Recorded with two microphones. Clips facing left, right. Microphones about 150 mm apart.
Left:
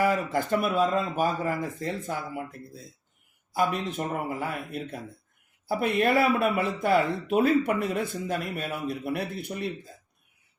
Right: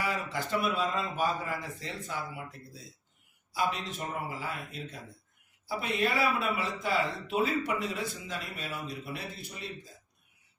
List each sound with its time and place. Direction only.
0.0 s speech: 50° left (ahead or behind)